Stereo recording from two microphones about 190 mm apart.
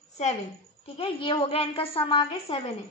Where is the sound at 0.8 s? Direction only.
30° left (ahead or behind).